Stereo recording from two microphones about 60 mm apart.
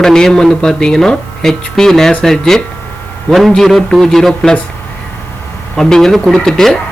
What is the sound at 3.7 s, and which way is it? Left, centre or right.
Speech, centre.